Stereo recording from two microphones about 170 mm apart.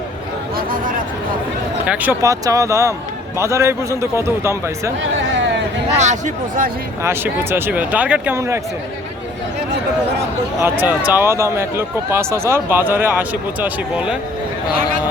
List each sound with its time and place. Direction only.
0.5 s a sound: 55° right (ahead or behind)
1.9 s speech: 10° right (ahead or behind)
6.0 s speech: 45° right (ahead or behind)
7.0 s speech: 15° right (ahead or behind)
10.6 s speech: 10° right (ahead or behind)